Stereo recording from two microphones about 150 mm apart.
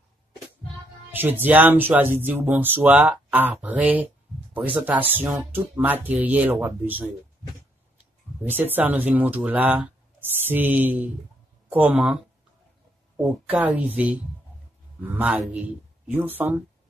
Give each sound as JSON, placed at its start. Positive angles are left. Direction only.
{"t": 1.1, "sound": "speech", "side_deg": -15}
{"t": 8.7, "sound": "speech", "side_deg": -10}
{"t": 13.5, "sound": "speech", "side_deg": -10}